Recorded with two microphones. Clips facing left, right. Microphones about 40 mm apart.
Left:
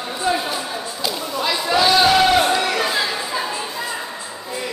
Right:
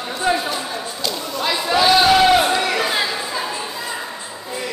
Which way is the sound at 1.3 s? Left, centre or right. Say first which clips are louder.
Even; centre.